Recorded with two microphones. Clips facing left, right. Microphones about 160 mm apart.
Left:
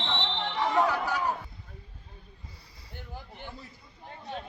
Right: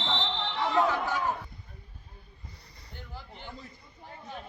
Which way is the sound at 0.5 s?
15° left (ahead or behind).